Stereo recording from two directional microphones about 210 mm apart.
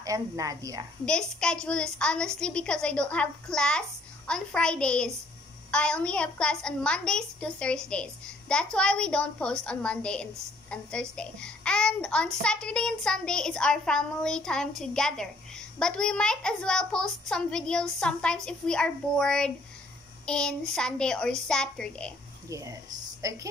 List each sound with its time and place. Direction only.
0.0 s a woman's voice: 15° right (ahead or behind)
1.0 s a child's voice: 5° left (ahead or behind)
22.5 s a woman's voice: 15° right (ahead or behind)